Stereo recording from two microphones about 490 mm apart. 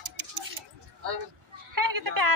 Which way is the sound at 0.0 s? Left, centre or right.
Right.